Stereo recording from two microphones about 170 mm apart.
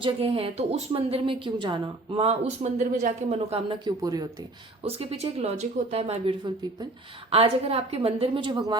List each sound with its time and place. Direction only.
0.0 s speech: 35° right (ahead or behind)
3.3 s speech: 35° right (ahead or behind)
3.8 s speech: 20° right (ahead or behind)
4.8 s speech: 35° right (ahead or behind)